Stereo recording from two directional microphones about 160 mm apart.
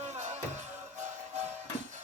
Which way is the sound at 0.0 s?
45° right (ahead or behind).